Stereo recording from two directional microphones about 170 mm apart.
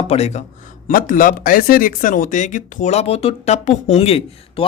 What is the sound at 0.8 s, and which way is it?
Speech, 55° left (ahead or behind).